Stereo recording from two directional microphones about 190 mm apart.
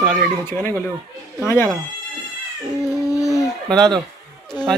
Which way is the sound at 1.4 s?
10° left (ahead or behind).